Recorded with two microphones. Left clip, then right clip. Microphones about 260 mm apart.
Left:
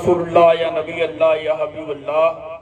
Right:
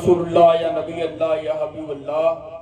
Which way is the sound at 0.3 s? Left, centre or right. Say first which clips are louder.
Left 2 dB; left.